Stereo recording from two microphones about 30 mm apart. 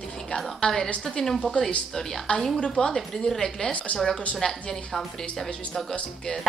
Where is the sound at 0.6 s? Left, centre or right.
Left.